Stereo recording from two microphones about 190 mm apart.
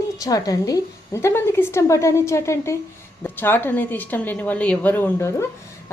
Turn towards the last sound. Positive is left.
turn(degrees=10)  # may be behind; listen again after turning